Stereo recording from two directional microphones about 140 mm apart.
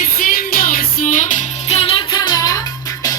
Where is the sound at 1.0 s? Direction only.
65° left (ahead or behind).